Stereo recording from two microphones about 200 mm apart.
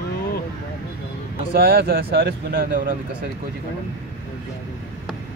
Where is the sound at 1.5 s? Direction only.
50° right (ahead or behind).